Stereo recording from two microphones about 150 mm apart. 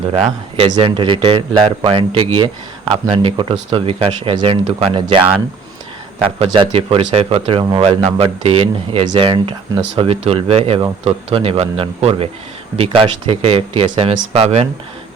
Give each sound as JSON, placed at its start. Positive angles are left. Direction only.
{"t": 0.1, "sound": "speech", "side_deg": -40}